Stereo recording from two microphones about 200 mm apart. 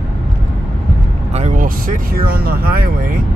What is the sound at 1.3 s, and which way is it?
Speech, 35° right (ahead or behind).